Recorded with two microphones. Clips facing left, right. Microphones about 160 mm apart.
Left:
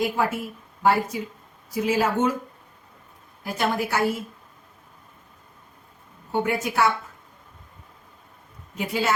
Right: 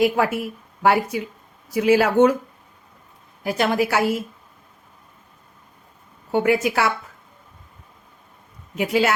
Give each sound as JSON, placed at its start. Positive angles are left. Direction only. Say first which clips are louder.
{"t": 0.0, "sound": "speech", "louder": "right 5 dB", "side_deg": -75}
{"t": 3.4, "sound": "a woman's voice", "louder": "right 5 dB", "side_deg": -90}
{"t": 6.3, "sound": "a woman's voice", "louder": "right 5 dB", "side_deg": -90}
{"t": 8.8, "sound": "a man's voice", "louder": "right 5 dB", "side_deg": -85}